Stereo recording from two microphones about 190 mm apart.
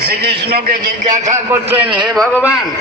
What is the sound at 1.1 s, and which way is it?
Speech, 40° right (ahead or behind).